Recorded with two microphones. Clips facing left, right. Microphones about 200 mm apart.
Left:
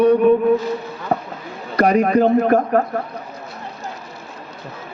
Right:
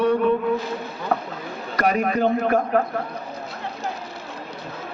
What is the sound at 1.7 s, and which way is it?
A man's voice, 40° left (ahead or behind).